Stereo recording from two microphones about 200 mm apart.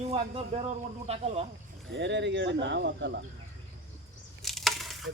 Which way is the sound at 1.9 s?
60° right (ahead or behind).